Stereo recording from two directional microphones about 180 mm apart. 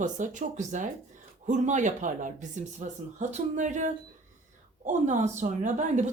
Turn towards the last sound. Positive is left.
turn(degrees=-40)  # may be behind; listen again after turning